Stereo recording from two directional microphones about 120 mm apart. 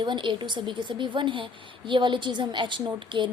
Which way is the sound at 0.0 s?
40° right (ahead or behind).